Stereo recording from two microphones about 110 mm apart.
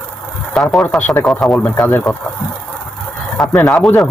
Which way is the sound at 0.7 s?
5° left (ahead or behind).